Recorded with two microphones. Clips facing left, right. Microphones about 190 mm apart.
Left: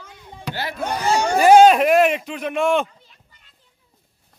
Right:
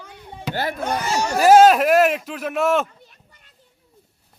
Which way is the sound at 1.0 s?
60° left (ahead or behind).